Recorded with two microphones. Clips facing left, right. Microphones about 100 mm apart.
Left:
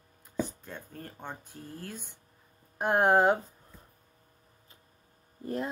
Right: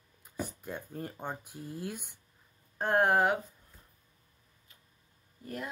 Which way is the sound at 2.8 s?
20° left (ahead or behind).